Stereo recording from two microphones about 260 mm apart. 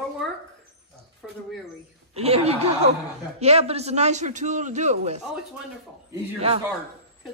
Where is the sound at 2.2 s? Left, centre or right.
Right.